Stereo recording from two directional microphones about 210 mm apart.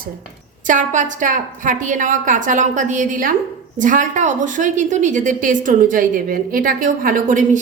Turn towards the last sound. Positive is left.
turn(degrees=-40)  # may be behind; listen again after turning